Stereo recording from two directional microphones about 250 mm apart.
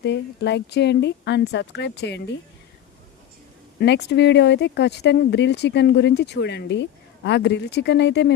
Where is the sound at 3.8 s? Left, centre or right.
Left.